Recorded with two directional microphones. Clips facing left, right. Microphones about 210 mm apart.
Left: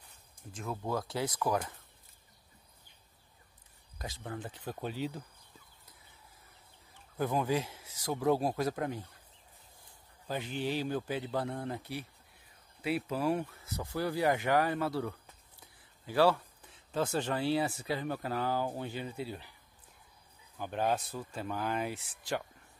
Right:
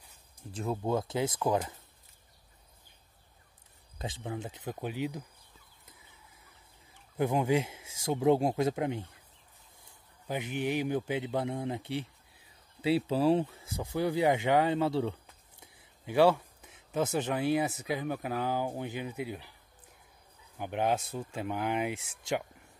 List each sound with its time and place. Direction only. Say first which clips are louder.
0.5 s speech: right 5 dB; 30° right (ahead or behind)
4.0 s speech: right 4 dB; 20° right (ahead or behind)
7.2 s speech: right 4 dB; 20° right (ahead or behind)
10.2 s speech: right 2 dB; 15° right (ahead or behind)
20.5 s speech: right 2 dB; 15° right (ahead or behind)